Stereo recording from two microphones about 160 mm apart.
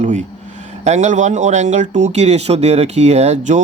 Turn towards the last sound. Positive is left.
turn(degrees=-45)  # may be behind; listen again after turning